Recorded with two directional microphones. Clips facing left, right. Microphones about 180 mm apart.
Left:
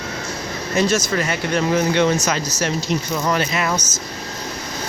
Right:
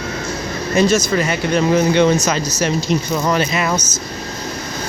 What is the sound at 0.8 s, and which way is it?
Speech, 25° right (ahead or behind).